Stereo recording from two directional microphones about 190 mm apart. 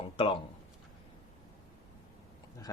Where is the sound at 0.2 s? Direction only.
30° left (ahead or behind).